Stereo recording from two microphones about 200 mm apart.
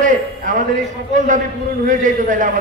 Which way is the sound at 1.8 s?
40° right (ahead or behind).